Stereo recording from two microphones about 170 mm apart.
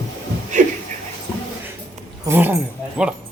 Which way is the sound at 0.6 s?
45° right (ahead or behind).